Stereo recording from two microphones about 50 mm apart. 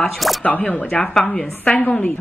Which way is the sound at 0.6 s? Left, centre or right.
Centre.